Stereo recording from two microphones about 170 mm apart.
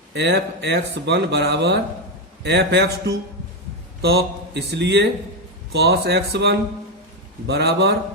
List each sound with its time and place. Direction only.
0.1 s a man's voice: 90° right
4.0 s speech: 75° right (ahead or behind)
5.7 s a man's voice: 75° right (ahead or behind)